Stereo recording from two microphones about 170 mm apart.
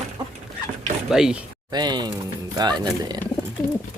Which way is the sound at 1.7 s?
25° right (ahead or behind).